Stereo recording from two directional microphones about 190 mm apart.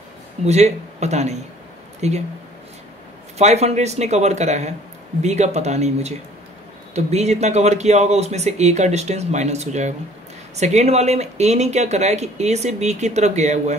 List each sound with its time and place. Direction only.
0.5 s speech: 35° right (ahead or behind)
3.3 s speech: 35° right (ahead or behind)